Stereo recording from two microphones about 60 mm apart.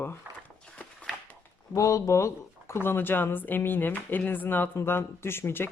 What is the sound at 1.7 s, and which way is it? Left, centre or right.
Speech, left.